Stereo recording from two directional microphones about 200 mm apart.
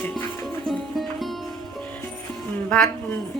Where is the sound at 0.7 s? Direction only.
Centre (ahead or behind).